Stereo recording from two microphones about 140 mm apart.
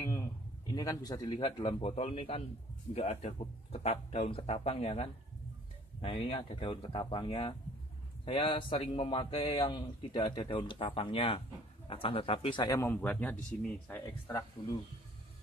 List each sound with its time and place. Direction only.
0.0 s a sound: 20° left (ahead or behind)
0.7 s a man's voice: 25° left (ahead or behind)
1.6 s speech: 45° left (ahead or behind); by 12.9 s 25° left (ahead or behind)
12.9 s speech: 10° left (ahead or behind)